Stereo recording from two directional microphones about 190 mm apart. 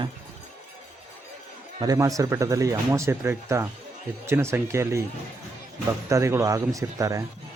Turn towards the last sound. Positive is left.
turn(degrees=-15)  # may be behind; listen again after turning